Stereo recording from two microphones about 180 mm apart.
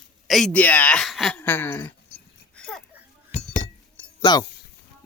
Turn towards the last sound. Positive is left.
turn(degrees=25)  # may be behind; listen again after turning